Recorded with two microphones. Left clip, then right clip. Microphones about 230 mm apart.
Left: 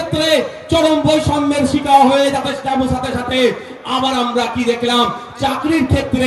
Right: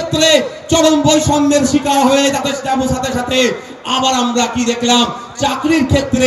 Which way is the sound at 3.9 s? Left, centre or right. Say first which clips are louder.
Right 2 dB; right.